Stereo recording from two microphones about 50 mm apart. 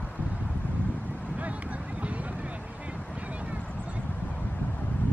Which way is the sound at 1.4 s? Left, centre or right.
Right.